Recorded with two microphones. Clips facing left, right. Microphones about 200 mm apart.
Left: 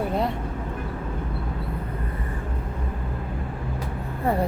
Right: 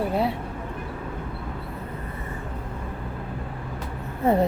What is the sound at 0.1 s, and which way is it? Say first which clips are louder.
Vehicle: right 1 dB; 5° right (ahead or behind).